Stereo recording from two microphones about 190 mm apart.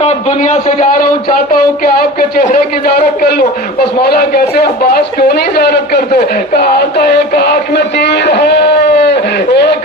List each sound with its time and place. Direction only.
0.0 s a man's voice: 35° left (ahead or behind)
1.8 s a man's voice: 50° left (ahead or behind)